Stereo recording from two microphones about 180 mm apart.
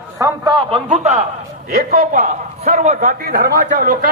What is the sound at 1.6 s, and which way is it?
A man's voice, 55° right (ahead or behind).